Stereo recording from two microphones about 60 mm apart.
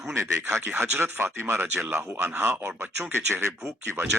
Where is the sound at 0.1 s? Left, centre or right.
Right.